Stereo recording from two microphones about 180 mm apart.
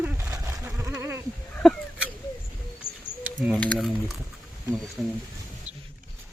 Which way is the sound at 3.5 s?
5° left (ahead or behind).